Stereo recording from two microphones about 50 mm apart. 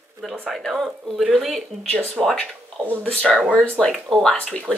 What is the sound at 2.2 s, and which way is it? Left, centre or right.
Speech, centre.